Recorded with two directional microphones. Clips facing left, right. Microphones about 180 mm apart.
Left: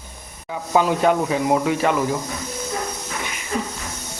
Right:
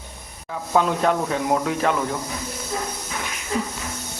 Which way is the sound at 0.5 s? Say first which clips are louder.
Left 2 dB; 5° left (ahead or behind).